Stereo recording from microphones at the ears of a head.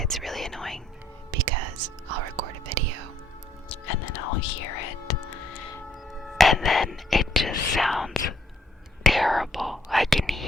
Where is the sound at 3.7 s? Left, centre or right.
Left.